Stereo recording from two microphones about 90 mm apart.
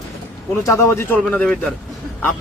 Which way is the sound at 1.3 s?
10° left (ahead or behind).